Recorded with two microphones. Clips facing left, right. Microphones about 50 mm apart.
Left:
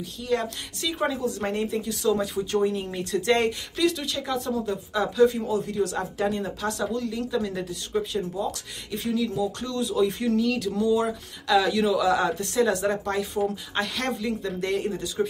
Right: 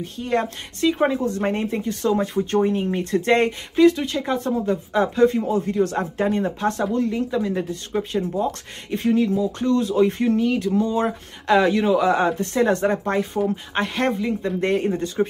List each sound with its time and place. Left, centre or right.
0.0 s a woman's voice: right
8.4 s a woman's voice: right
9.3 s a woman's voice: right
10.9 s speech: right